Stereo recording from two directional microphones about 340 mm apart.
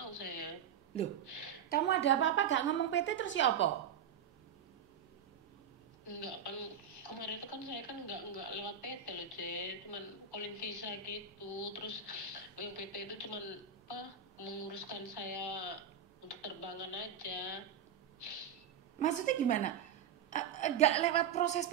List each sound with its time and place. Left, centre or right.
0.0 s a sound: left
1.7 s a woman's voice: left
6.0 s a woman's voice: left
18.9 s a woman's voice: left